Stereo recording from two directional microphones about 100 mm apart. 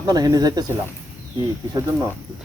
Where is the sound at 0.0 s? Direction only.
35° right (ahead or behind).